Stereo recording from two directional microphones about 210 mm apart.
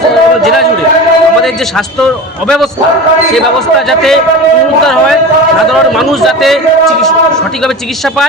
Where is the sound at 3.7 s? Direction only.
Centre (ahead or behind).